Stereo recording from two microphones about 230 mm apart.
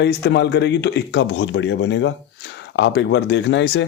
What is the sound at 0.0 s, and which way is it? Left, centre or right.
Speech, left.